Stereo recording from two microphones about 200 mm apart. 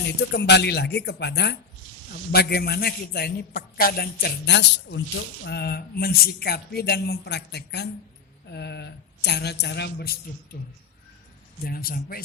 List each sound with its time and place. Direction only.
0.2 s a man's voice: 55° left (ahead or behind)
11.6 s a man's voice: 50° left (ahead or behind)